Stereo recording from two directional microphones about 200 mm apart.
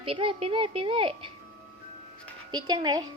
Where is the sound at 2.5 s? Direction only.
20° right (ahead or behind).